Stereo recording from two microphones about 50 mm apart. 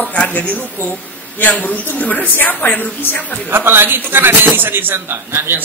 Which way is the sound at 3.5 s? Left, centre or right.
Right.